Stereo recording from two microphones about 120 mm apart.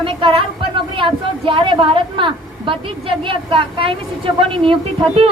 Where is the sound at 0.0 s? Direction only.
45° right (ahead or behind).